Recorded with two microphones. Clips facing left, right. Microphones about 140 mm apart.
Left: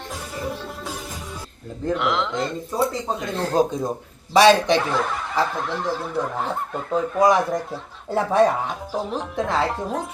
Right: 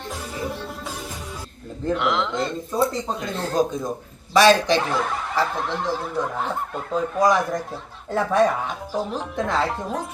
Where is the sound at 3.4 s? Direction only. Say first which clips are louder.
Left 2 dB; 25° left (ahead or behind).